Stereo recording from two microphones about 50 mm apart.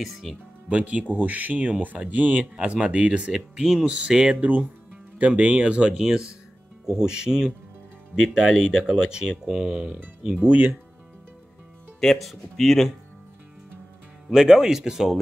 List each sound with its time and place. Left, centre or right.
0.0 s speech: centre
0.7 s speech: right
2.5 s speech: centre
3.8 s speech: right
4.4 s speech: right; by 9.8 s centre
12.0 s speech: centre
14.3 s speech: centre